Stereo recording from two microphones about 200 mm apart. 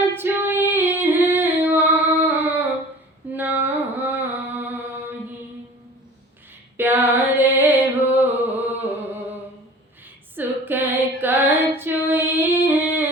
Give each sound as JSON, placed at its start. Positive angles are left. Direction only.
{"t": 0.2, "sound": "female singing", "side_deg": -10}
{"t": 3.3, "sound": "a sound", "side_deg": -10}
{"t": 3.7, "sound": "music", "side_deg": -10}
{"t": 6.7, "sound": "music", "side_deg": -10}
{"t": 8.1, "sound": "a sound", "side_deg": -10}
{"t": 10.3, "sound": "female singing", "side_deg": -10}